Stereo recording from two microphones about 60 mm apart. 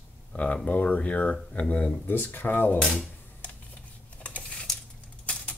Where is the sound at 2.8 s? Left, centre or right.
Centre.